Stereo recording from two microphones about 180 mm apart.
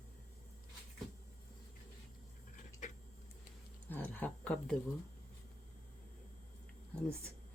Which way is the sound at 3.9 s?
10° left (ahead or behind).